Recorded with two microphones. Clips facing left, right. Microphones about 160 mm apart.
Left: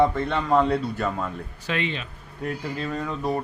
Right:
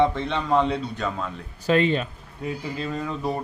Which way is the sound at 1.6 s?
40° right (ahead or behind).